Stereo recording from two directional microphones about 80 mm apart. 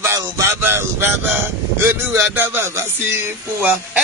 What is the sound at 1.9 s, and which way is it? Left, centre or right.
Speech, right.